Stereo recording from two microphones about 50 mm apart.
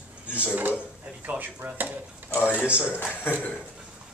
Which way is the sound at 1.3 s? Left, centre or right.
Right.